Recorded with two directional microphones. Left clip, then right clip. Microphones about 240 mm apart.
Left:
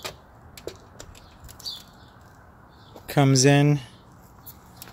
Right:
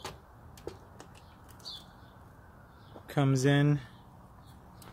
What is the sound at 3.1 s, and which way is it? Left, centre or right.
Speech, left.